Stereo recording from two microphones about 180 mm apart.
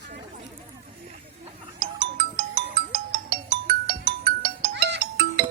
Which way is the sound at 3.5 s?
50° right (ahead or behind).